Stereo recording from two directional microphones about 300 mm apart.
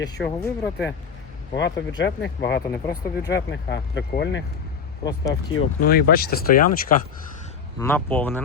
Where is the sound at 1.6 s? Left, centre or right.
Left.